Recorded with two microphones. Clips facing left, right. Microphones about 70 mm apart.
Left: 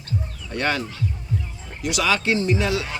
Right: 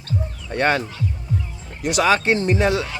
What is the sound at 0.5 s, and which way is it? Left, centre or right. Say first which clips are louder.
Speech: right 4 dB; right.